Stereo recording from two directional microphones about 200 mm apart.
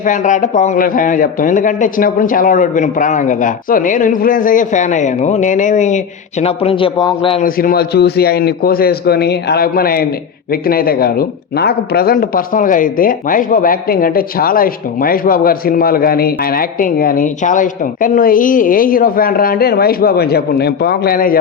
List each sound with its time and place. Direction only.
0.0 s speech: 40° left (ahead or behind)
7.4 s speech: 45° left (ahead or behind)